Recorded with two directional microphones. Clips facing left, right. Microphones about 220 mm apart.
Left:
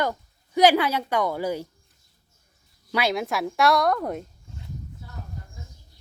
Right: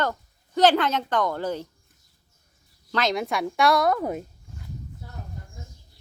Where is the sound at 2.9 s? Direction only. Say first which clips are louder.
Even; 10° left (ahead or behind).